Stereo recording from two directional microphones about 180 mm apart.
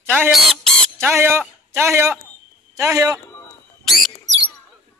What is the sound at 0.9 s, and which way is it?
A man's voice, 15° right (ahead or behind).